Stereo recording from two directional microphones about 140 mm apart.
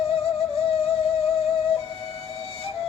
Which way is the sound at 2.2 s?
45° left (ahead or behind).